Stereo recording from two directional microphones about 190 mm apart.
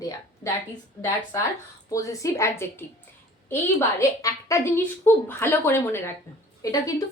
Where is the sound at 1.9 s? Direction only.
15° left (ahead or behind).